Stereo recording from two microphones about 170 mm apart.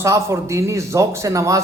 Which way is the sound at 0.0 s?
15° right (ahead or behind).